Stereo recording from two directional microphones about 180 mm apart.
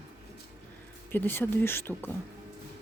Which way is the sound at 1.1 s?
10° left (ahead or behind).